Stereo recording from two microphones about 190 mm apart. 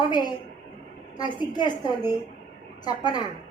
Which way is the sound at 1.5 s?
25° left (ahead or behind).